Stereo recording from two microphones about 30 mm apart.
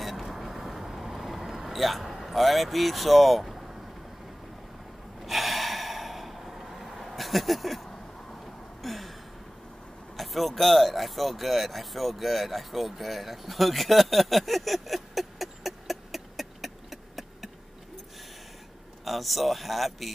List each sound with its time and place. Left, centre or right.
0.0 s vehicle: centre
5.2 s gasp: centre
8.8 s a sound: centre
10.1 s speech: centre
19.0 s speech: centre